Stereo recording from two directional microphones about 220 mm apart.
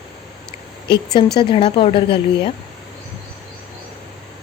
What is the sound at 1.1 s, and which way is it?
A woman's voice, 20° left (ahead or behind).